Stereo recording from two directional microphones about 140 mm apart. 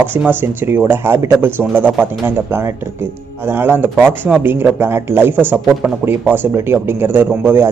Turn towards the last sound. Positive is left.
turn(degrees=-15)  # may be behind; listen again after turning